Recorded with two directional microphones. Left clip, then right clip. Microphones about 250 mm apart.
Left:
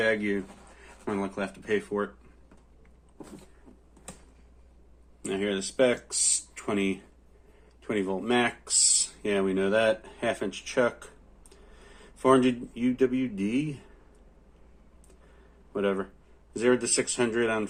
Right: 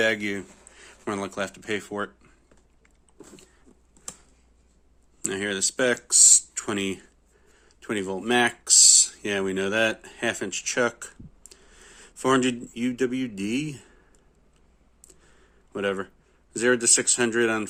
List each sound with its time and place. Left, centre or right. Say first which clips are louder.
0.0 s speech: right 2 dB; right
5.2 s speech: right 3 dB; right
15.7 s speech: right 1 dB; right